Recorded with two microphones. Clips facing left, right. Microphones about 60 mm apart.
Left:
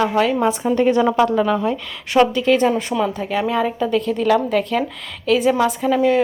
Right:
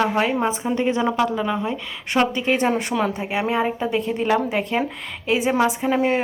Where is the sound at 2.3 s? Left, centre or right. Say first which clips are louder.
Left 4 dB; right.